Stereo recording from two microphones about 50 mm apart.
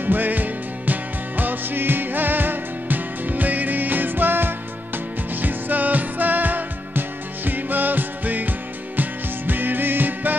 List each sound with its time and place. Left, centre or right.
0.0 s music: right